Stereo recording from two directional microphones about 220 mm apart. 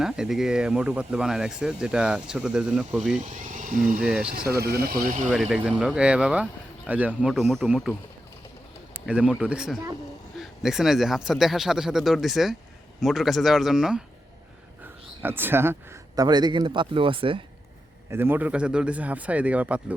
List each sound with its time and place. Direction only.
0.0 s speech: centre (ahead or behind)
3.2 s speech: 35° right (ahead or behind)
4.0 s speech: 5° right (ahead or behind)
4.4 s speech: 45° right (ahead or behind)
5.3 s speech: centre (ahead or behind)
15.2 s a man's voice: 10° right (ahead or behind)
18.1 s speech: 10° right (ahead or behind)